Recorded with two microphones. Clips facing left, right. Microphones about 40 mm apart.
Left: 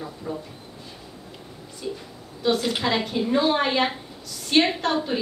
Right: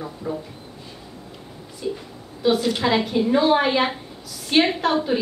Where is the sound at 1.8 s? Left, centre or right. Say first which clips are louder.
Right 4 dB; centre.